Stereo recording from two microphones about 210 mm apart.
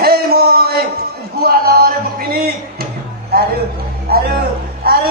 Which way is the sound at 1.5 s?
45° right (ahead or behind).